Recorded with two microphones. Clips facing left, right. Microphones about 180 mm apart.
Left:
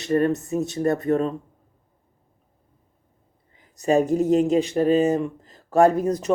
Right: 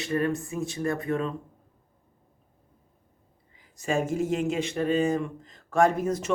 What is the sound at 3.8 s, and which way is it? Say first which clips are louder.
Speech: left 7 dB; 40° left (ahead or behind).